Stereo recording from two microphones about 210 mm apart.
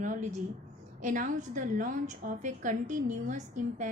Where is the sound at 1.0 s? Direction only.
40° right (ahead or behind).